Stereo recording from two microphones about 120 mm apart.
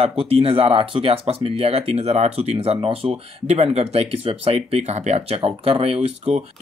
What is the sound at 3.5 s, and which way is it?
Speech, 60° right (ahead or behind).